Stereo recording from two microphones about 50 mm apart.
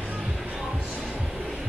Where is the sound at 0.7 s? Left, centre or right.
Right.